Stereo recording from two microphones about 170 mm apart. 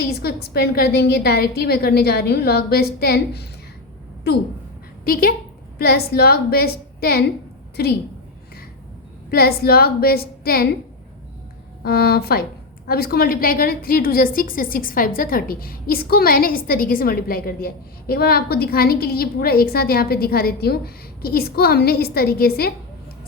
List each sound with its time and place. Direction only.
0.1 s a woman's voice: 70° left (ahead or behind)
5.0 s a woman's voice: 60° left (ahead or behind)
9.3 s a woman's voice: 65° left (ahead or behind)
11.8 s a woman's voice: 65° left (ahead or behind)